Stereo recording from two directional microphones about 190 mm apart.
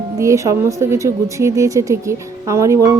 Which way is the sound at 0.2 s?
15° right (ahead or behind).